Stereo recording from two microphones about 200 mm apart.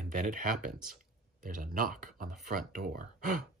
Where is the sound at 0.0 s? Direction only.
40° right (ahead or behind).